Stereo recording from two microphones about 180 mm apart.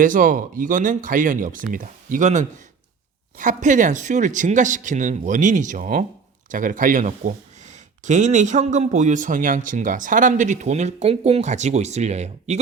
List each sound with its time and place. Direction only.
0.0 s speech: 45° right (ahead or behind)